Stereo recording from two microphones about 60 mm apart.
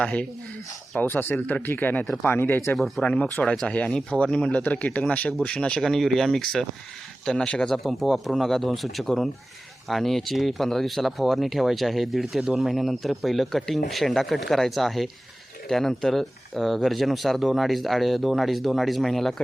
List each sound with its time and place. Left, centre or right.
0.0 s speech: centre
0.9 s speech: left
2.7 s speech: centre
3.0 s speech: centre
5.8 s speech: centre
7.9 s speech: centre